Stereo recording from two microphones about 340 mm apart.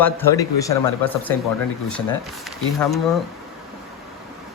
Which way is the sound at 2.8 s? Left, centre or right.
Centre.